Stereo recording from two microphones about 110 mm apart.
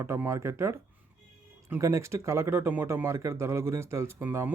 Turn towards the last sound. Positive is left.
turn(degrees=-20)  # may be behind; listen again after turning